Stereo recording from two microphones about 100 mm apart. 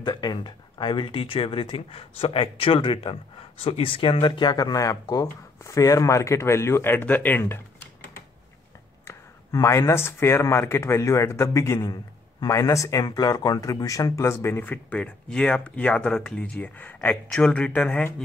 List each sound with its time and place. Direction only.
0.0 s speech: 45° left (ahead or behind); by 7.9 s 20° left (ahead or behind)
9.0 s speech: 30° left (ahead or behind)
14.6 s speech: 15° left (ahead or behind)